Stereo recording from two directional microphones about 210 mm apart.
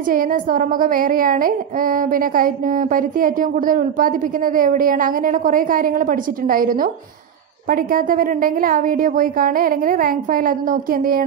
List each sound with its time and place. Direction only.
0.0 s a woman's voice: 40° right (ahead or behind)